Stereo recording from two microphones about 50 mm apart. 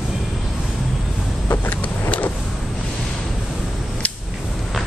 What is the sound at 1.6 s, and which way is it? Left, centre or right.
Vehicle, left.